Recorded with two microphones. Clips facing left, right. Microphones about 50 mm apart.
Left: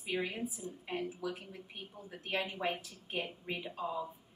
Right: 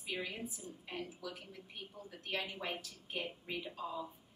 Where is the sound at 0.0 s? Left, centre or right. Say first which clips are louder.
Left 5 dB; centre.